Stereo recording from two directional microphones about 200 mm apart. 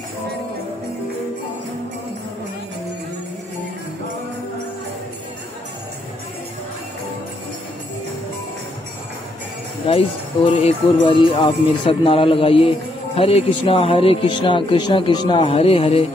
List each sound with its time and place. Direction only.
9.8 s speech: 25° left (ahead or behind)